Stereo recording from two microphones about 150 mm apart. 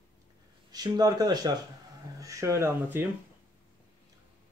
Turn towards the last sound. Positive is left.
turn(degrees=-15)  # may be behind; listen again after turning